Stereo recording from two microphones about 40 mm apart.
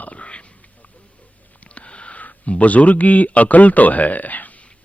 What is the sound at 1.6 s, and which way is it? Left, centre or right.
Speech, left.